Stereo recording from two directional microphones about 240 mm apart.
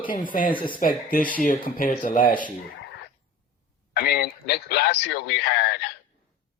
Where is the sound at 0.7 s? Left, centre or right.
Left.